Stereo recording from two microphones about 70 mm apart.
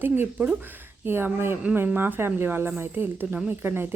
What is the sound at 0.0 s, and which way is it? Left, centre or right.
Speech, right.